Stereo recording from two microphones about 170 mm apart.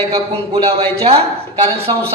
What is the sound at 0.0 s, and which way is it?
A man's voice, 35° right (ahead or behind).